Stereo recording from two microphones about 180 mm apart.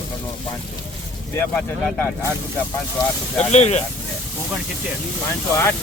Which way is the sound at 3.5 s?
40° left (ahead or behind).